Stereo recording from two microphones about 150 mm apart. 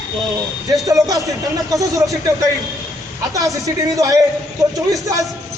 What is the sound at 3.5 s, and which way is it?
Speech, 20° right (ahead or behind).